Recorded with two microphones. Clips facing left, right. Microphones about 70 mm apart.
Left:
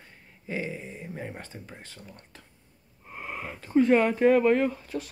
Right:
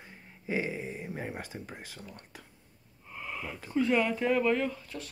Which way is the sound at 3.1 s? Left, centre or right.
Left.